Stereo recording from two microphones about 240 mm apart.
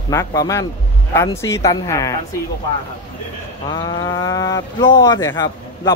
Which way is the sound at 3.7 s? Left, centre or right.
Centre.